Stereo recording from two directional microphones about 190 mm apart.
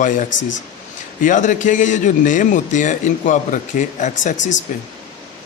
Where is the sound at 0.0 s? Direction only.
40° left (ahead or behind).